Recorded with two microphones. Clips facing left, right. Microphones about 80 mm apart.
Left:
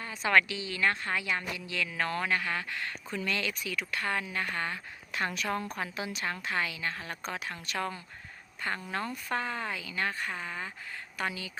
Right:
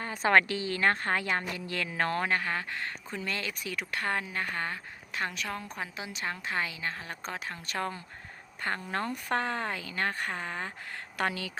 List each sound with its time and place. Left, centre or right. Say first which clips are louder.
0.0 s speech: right 2 dB; right
1.9 s a woman's voice: right 2 dB; right
11.2 s a woman's voice: right 4 dB; right